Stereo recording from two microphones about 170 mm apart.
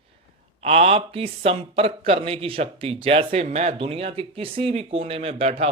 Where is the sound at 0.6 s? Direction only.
35° right (ahead or behind).